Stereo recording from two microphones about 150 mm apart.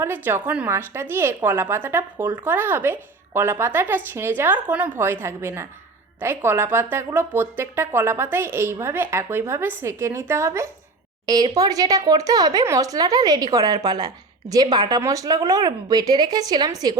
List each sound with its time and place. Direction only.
0.0 s a woman's voice: 15° right (ahead or behind)